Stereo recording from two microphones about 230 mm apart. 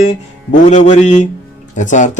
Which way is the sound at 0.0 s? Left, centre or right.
Left.